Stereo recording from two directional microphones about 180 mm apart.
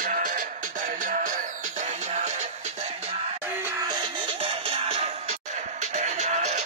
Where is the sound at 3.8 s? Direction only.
25° right (ahead or behind).